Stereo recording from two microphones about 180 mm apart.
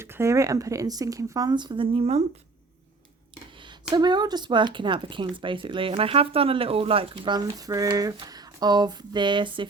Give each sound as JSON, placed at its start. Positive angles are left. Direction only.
{"t": 0.0, "sound": "speech", "side_deg": -15}
{"t": 3.6, "sound": "speech", "side_deg": -25}